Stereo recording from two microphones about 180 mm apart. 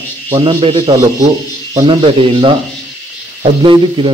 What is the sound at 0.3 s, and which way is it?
A man's voice, 30° right (ahead or behind).